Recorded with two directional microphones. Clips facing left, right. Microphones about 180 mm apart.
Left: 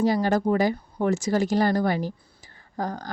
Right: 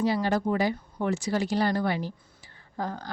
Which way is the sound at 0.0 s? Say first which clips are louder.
Left 4 dB; 45° left (ahead or behind).